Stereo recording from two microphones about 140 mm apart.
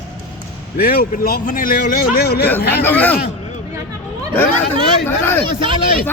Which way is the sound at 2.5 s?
15° left (ahead or behind).